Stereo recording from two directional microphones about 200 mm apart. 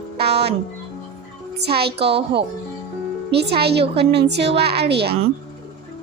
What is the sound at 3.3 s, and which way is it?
A woman's voice, 55° right (ahead or behind).